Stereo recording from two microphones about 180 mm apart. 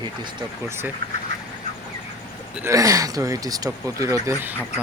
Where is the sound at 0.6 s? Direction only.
15° right (ahead or behind).